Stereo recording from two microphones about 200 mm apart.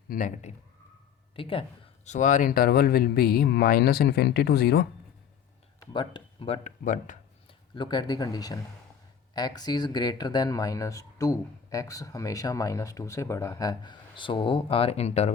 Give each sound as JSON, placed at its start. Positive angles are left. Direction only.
{"t": 0.1, "sound": "speech", "side_deg": 40}
{"t": 1.4, "sound": "speech", "side_deg": 25}
{"t": 2.0, "sound": "speech", "side_deg": 40}
{"t": 5.9, "sound": "speech", "side_deg": 25}
{"t": 7.8, "sound": "speech", "side_deg": 20}